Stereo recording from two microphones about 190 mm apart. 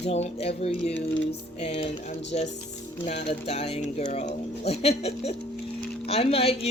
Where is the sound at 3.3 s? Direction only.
30° left (ahead or behind).